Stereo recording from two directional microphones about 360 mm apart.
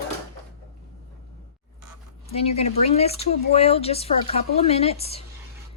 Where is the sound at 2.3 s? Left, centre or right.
Centre.